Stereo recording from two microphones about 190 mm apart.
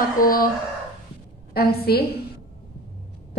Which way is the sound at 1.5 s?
55° left (ahead or behind).